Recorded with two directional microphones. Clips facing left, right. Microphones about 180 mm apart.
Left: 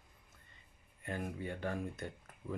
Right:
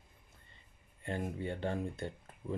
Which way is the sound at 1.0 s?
30° right (ahead or behind).